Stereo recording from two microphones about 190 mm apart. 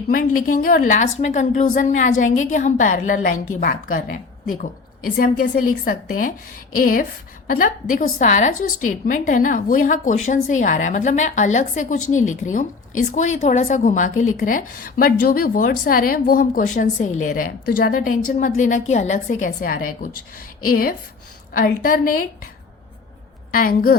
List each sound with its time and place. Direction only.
0.1 s a woman's voice: 45° left (ahead or behind)
23.5 s a woman's voice: 50° left (ahead or behind)